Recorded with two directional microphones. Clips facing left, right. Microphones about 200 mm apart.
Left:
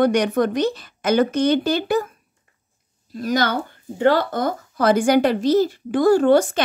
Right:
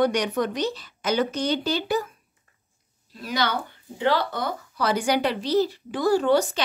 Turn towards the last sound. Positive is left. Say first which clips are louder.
# left 5 dB
turn(degrees=50)  # may be behind; listen again after turning